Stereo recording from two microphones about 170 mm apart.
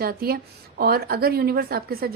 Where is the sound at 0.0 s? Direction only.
65° right (ahead or behind).